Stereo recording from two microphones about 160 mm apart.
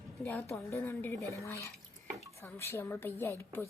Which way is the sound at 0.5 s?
15° left (ahead or behind).